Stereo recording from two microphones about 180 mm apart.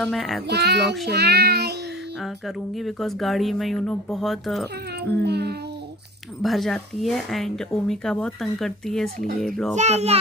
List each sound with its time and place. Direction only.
0.0 s speech: centre (ahead or behind)
0.5 s child singing: 65° right (ahead or behind)
2.2 s speech: centre (ahead or behind)
5.2 s child singing: 65° right (ahead or behind)
6.4 s speech: centre (ahead or behind)
9.8 s a child's voice: 35° right (ahead or behind)